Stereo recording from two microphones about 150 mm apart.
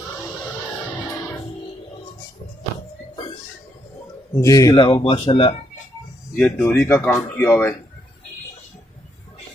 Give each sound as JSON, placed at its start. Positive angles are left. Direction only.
{"t": 4.3, "sound": "speech", "side_deg": 20}
{"t": 4.7, "sound": "speech", "side_deg": 35}
{"t": 6.3, "sound": "speech", "side_deg": 10}
{"t": 6.9, "sound": "speech", "side_deg": 20}